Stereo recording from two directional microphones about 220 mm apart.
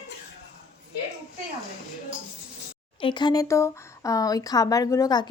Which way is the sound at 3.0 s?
20° left (ahead or behind).